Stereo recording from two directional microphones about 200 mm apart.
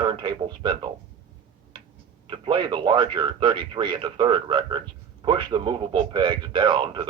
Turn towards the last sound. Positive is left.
turn(degrees=-25)  # may be behind; listen again after turning